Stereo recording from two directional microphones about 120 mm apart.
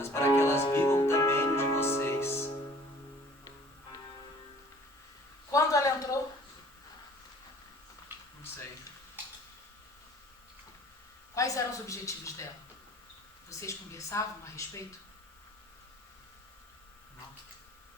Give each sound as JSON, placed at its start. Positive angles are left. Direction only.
{"t": 0.0, "sound": "music", "side_deg": 20}
{"t": 5.5, "sound": "a sound", "side_deg": 25}
{"t": 11.3, "sound": "a woman's voice", "side_deg": 25}
{"t": 13.7, "sound": "a woman's voice", "side_deg": 25}